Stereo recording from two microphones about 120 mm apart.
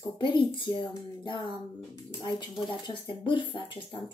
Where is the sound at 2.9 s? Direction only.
40° left (ahead or behind).